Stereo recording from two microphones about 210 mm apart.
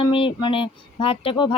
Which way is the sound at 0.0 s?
25° left (ahead or behind).